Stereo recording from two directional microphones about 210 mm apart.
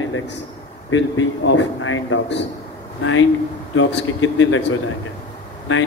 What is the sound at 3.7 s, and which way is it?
Speech, 70° left (ahead or behind).